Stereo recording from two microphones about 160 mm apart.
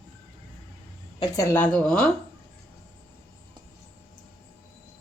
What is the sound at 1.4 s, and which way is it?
Speech, 10° left (ahead or behind).